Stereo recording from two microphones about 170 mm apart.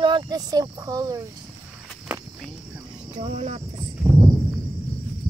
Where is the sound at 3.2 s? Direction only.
40° right (ahead or behind).